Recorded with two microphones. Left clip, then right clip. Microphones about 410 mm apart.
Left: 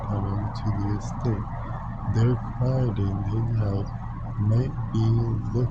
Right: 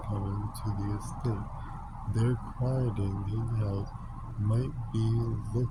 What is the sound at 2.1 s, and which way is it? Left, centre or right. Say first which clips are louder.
Speech: left 6 dB; right.